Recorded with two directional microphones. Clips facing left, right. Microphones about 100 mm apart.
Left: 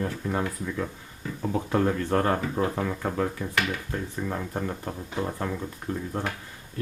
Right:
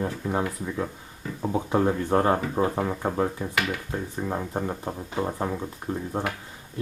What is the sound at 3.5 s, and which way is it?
Speech, 15° right (ahead or behind).